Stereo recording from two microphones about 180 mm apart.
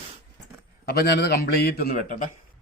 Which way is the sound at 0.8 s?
60° left (ahead or behind).